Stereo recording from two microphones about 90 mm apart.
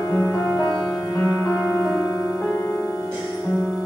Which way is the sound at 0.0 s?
35° left (ahead or behind).